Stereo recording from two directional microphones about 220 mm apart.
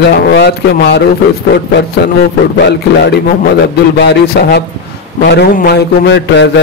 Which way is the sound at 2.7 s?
50° left (ahead or behind).